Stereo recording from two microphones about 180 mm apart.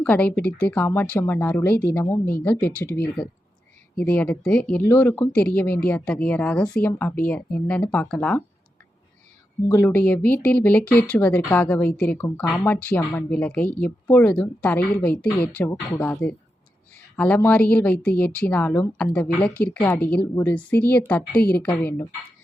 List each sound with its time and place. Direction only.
0.0 s speech: 10° left (ahead or behind)
9.6 s speech: 10° left (ahead or behind)